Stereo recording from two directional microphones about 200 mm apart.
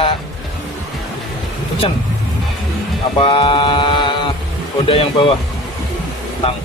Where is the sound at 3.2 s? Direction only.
25° left (ahead or behind).